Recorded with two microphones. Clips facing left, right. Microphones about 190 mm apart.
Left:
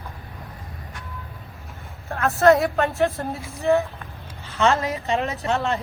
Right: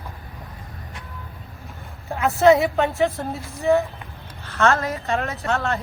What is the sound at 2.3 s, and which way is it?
Speech, centre (ahead or behind).